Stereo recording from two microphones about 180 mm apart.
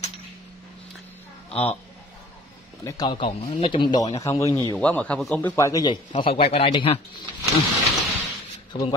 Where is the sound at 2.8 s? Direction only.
20° left (ahead or behind).